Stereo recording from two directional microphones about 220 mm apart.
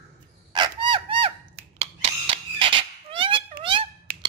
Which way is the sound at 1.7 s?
25° right (ahead or behind).